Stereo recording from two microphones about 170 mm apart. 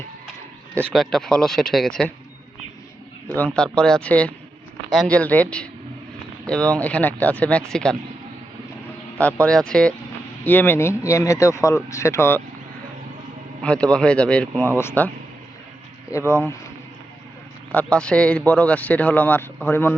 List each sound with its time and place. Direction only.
0.9 s speech: centre (ahead or behind)
3.2 s speech: 10° left (ahead or behind)
9.1 s speech: 10° left (ahead or behind)
13.6 s speech: 5° left (ahead or behind)
16.1 s speech: 15° left (ahead or behind)
17.7 s speech: 5° left (ahead or behind)